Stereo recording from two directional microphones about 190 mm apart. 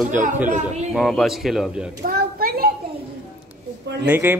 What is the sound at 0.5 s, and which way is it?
Speech, 35° right (ahead or behind).